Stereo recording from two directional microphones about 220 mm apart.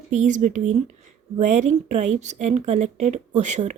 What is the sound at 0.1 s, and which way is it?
Speech, 35° right (ahead or behind).